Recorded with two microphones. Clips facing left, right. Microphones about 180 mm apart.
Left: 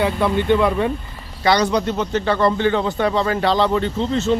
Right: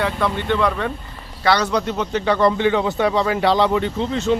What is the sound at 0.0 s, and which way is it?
Speech, 10° left (ahead or behind).